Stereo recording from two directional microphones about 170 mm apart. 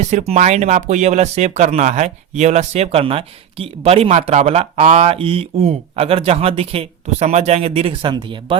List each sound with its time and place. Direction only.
0.0 s speech: 45° right (ahead or behind)